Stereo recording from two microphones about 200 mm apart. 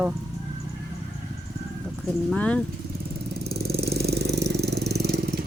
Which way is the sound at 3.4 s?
50° right (ahead or behind).